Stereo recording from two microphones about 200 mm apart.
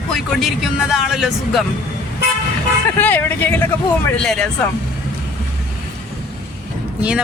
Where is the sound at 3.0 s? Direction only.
10° left (ahead or behind).